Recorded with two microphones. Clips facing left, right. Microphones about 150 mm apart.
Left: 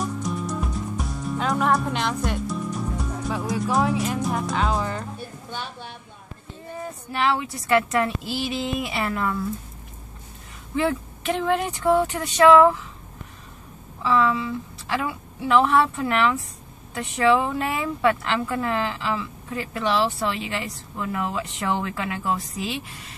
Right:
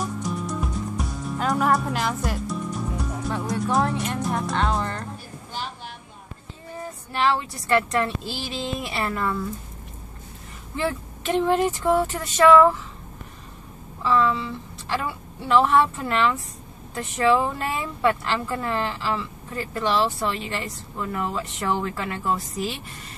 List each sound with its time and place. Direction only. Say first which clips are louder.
0.0 s music: left 1 dB; centre (ahead or behind)
7.1 s speech: right 1 dB; centre (ahead or behind)
10.8 s speech: left 3 dB; centre (ahead or behind)
14.0 s speech: even; 5° left (ahead or behind)